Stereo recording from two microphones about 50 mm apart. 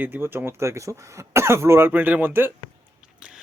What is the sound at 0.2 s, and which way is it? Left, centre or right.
Speech, right.